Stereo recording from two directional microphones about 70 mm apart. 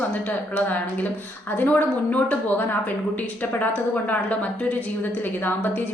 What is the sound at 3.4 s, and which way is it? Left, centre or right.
A woman's voice, left.